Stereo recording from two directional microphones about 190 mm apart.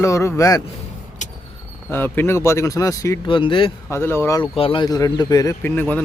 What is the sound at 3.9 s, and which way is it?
Speech, 10° left (ahead or behind).